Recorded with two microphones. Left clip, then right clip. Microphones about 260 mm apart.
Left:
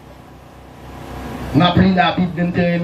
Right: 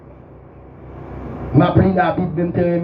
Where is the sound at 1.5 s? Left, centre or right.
Left.